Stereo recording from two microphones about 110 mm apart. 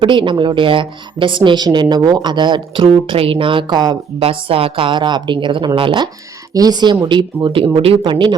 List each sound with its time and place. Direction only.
0.0 s a woman's voice: 45° right (ahead or behind)
4.2 s a woman's voice: 55° right (ahead or behind)
6.5 s a woman's voice: 35° right (ahead or behind)